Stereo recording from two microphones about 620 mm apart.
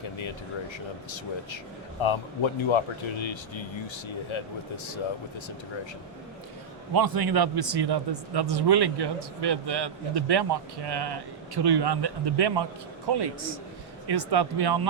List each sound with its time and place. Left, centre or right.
2.0 s speech: left
6.9 s a man's voice: right